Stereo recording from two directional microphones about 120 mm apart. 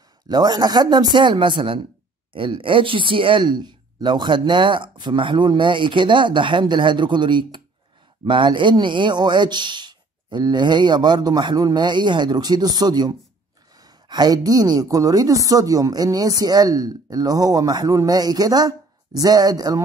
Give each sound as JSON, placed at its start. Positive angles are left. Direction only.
{"t": 0.3, "sound": "a woman's voice", "side_deg": -35}